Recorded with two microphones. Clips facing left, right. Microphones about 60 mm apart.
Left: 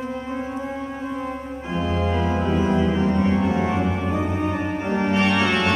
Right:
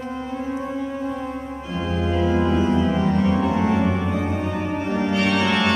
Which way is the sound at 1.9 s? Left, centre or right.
Left.